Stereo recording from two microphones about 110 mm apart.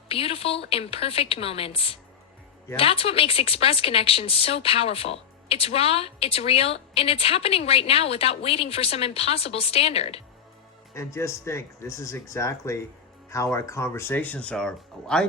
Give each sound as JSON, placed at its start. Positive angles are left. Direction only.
{"t": 0.1, "sound": "speech", "side_deg": 60}
{"t": 10.9, "sound": "speech", "side_deg": 25}